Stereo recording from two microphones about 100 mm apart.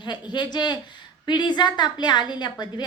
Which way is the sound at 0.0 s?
50° left (ahead or behind).